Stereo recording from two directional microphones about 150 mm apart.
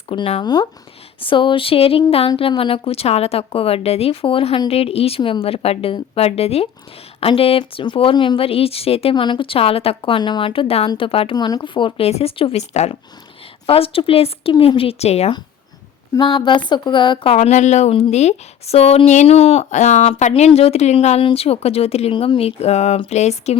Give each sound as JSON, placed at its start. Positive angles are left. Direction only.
{"t": 0.1, "sound": "speech", "side_deg": 40}
{"t": 0.4, "sound": "speech", "side_deg": 30}
{"t": 16.1, "sound": "speech", "side_deg": 30}
{"t": 17.3, "sound": "speech", "side_deg": 50}